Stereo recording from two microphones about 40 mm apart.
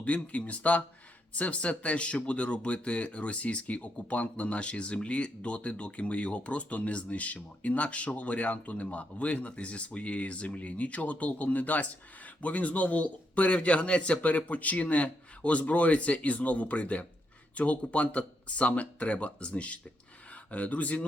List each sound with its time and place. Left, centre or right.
0.0 s speech: left